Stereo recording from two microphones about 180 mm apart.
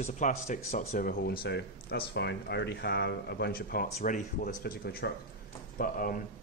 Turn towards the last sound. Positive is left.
turn(degrees=50)  # may be behind; listen again after turning